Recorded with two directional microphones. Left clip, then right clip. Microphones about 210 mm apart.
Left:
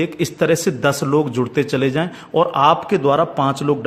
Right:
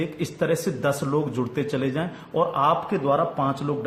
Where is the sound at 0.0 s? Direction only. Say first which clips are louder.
Left 8 dB; 45° left (ahead or behind).